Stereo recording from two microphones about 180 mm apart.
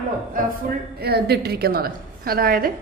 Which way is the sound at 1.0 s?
60° right (ahead or behind).